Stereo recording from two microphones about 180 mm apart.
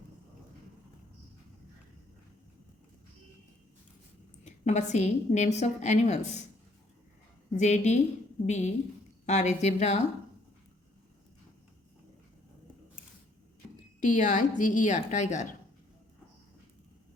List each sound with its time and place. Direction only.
4.4 s a woman's voice: 40° left (ahead or behind)
7.6 s a woman's voice: 40° left (ahead or behind)
14.0 s a woman's voice: 45° left (ahead or behind)